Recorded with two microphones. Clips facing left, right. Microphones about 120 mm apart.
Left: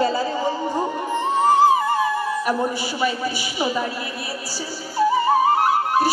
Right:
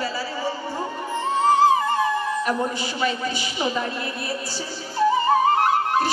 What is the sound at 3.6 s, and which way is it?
Speech, 10° left (ahead or behind).